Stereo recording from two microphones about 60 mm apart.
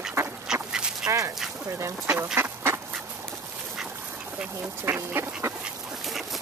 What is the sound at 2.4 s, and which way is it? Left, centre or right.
Duck, right.